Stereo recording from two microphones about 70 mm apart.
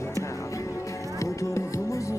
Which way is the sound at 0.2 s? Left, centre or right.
Left.